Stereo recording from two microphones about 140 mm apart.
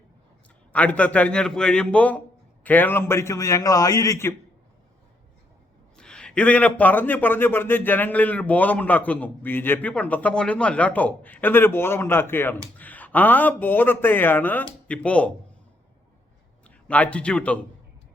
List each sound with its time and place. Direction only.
0.7 s a man's voice: 10° left (ahead or behind)
6.0 s a man's voice: 5° left (ahead or behind)
16.6 s a man's voice: 10° left (ahead or behind)